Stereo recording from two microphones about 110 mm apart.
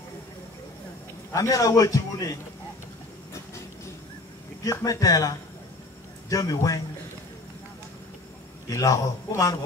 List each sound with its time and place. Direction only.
1.3 s a man's voice: 30° left (ahead or behind)
4.6 s a man's voice: 30° left (ahead or behind)
8.6 s a man's voice: 30° left (ahead or behind)